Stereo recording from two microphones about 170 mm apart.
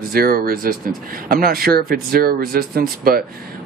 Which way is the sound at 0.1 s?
60° right (ahead or behind).